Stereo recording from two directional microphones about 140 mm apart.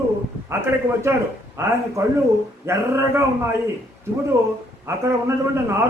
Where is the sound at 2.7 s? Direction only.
20° right (ahead or behind).